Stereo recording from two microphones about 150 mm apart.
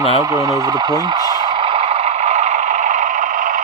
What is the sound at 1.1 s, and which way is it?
Vehicle, 25° right (ahead or behind).